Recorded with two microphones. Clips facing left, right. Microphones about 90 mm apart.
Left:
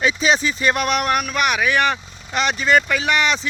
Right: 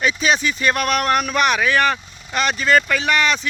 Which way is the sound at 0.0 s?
20° left (ahead or behind).